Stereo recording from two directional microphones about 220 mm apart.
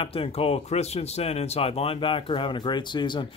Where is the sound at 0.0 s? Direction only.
25° left (ahead or behind).